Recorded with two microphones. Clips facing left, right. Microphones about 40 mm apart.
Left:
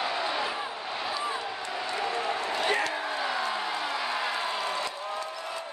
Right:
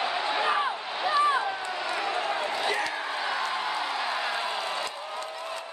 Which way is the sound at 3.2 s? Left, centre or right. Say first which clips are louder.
Right 2 dB; centre.